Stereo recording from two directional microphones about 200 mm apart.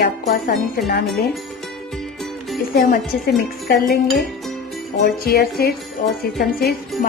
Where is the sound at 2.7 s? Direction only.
55° left (ahead or behind).